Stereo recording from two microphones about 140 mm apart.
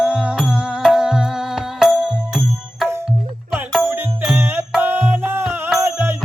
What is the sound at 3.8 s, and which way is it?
Music, 15° right (ahead or behind).